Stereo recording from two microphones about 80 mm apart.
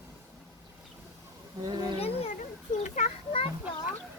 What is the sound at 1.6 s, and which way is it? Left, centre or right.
Speech, right.